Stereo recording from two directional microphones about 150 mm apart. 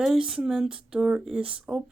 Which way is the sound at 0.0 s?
5° right (ahead or behind).